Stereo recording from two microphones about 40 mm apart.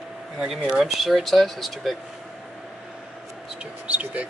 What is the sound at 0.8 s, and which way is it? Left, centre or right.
Speech, centre.